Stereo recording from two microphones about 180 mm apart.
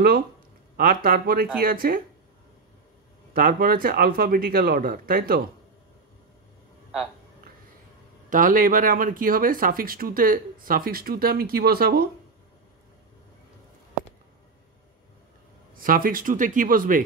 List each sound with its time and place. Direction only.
0.7 s speech: 55° right (ahead or behind)
3.3 s speech: 55° right (ahead or behind)
8.3 s speech: 50° right (ahead or behind)
15.8 s speech: 50° right (ahead or behind)